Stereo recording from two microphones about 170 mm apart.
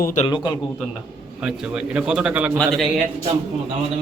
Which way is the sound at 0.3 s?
25° left (ahead or behind).